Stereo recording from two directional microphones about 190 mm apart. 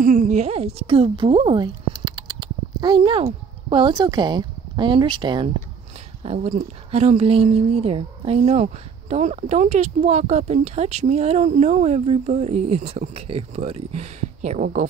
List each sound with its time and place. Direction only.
0.0 s a woman's voice: 40° right (ahead or behind); by 5.5 s 25° right (ahead or behind)
6.2 s a woman's voice: 35° right (ahead or behind)